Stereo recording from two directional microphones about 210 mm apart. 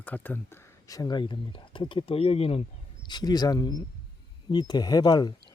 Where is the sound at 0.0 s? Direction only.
10° left (ahead or behind).